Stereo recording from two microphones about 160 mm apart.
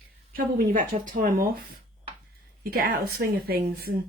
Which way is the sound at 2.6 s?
65° right (ahead or behind).